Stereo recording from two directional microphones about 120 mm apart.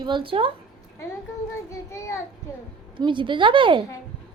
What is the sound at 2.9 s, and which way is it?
Speech, 45° right (ahead or behind).